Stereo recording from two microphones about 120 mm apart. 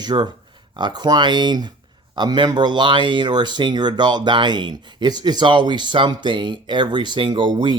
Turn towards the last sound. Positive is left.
turn(degrees=-45)  # may be behind; listen again after turning